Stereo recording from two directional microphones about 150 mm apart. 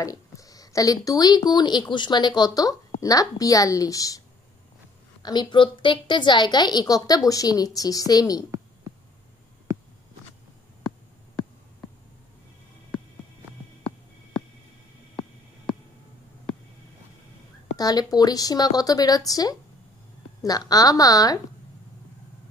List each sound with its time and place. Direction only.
0.0 s a woman's voice: 25° left (ahead or behind)
5.2 s a woman's voice: 30° left (ahead or behind)
9.7 s a sound: 20° right (ahead or behind)
17.7 s a woman's voice: 25° left (ahead or behind)